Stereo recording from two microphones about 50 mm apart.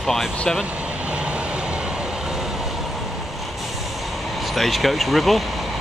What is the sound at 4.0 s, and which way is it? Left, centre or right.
Vehicle, centre.